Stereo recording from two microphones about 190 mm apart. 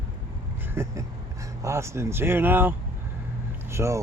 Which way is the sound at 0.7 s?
15° right (ahead or behind).